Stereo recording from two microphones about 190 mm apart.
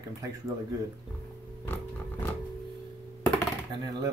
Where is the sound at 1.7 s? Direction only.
10° left (ahead or behind).